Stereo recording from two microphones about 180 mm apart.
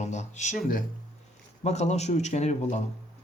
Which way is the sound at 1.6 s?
40° left (ahead or behind).